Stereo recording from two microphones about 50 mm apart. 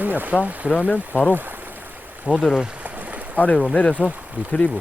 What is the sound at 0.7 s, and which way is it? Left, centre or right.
Speech, left.